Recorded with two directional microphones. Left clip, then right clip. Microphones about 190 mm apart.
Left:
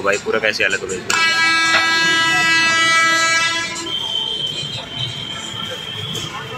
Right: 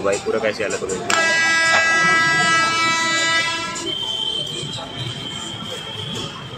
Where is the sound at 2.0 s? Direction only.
45° left (ahead or behind).